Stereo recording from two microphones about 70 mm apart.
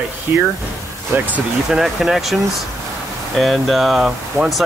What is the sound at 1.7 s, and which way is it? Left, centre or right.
Speech, centre.